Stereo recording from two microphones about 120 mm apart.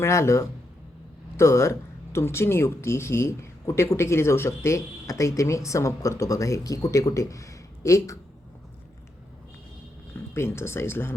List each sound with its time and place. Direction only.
0.0 s speech: 25° left (ahead or behind)
10.3 s speech: 20° left (ahead or behind)